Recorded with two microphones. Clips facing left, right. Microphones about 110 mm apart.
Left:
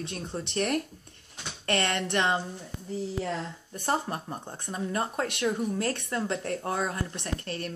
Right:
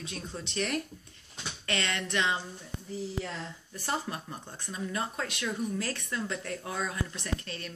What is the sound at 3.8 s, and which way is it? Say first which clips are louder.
Speech: left 5 dB; 40° left (ahead or behind).